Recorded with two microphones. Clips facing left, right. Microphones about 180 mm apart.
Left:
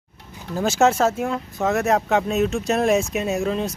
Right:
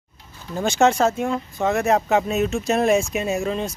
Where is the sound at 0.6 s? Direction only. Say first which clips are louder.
Even; 5° left (ahead or behind).